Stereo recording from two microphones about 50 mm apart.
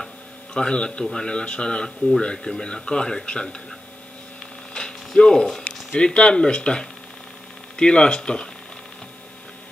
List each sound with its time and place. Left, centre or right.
0.6 s speech: centre
4.7 s a sound: centre
5.9 s speech: centre